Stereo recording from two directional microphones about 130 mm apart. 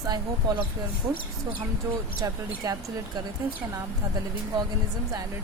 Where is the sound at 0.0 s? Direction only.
30° right (ahead or behind).